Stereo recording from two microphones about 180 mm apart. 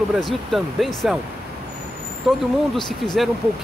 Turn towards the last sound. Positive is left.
turn(degrees=0)  # may be behind; listen again after turning